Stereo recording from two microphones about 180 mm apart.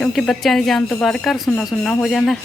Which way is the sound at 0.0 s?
Centre (ahead or behind).